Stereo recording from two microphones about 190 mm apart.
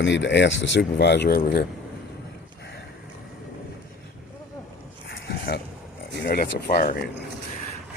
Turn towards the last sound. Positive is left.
turn(degrees=50)  # may be behind; listen again after turning